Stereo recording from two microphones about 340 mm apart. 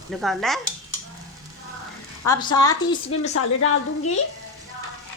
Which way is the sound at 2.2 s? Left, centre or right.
Centre.